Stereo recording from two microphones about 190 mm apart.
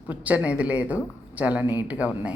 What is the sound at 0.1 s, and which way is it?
Speech, 10° right (ahead or behind).